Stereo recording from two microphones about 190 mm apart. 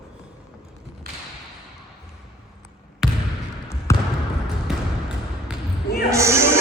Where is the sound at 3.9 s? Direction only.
15° left (ahead or behind).